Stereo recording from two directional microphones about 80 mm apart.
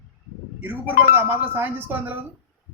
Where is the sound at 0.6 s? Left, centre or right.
Right.